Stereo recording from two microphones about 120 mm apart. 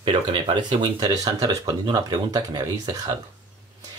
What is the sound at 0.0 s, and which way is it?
Speech, 45° right (ahead or behind).